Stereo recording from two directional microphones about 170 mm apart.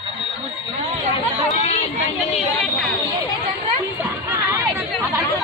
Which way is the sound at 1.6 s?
40° left (ahead or behind).